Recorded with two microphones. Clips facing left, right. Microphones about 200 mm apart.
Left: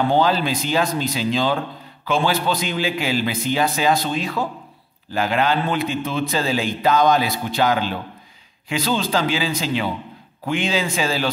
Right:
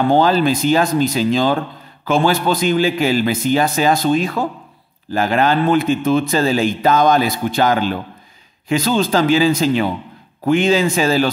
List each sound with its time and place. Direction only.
0.1 s a man's voice: 50° right (ahead or behind)